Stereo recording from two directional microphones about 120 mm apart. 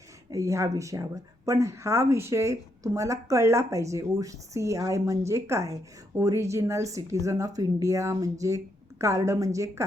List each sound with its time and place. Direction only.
0.3 s speech: 25° right (ahead or behind)